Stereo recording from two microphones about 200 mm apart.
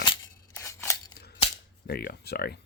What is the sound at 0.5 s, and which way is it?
Scissors, 15° left (ahead or behind).